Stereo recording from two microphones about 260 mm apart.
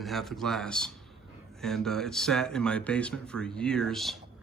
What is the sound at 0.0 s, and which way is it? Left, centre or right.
Speech, centre.